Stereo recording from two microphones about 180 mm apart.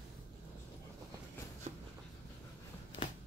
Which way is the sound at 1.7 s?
40° right (ahead or behind).